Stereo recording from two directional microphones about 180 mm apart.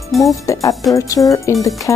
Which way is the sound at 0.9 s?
20° left (ahead or behind).